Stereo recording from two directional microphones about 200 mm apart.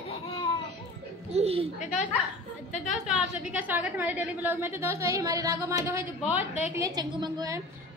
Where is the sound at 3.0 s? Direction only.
5° right (ahead or behind).